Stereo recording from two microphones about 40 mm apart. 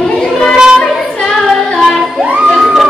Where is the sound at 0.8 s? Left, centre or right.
Centre.